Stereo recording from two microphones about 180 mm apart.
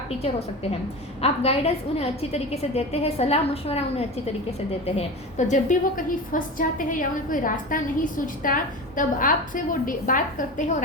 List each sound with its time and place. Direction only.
0.2 s a woman's voice: 35° left (ahead or behind)